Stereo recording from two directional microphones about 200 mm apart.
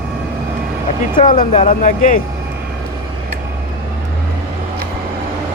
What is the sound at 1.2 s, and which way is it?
Speech, 35° left (ahead or behind).